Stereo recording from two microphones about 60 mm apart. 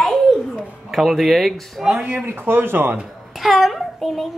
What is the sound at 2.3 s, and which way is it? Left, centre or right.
Speech, right.